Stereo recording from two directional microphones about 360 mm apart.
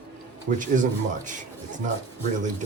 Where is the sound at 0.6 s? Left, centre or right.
Right.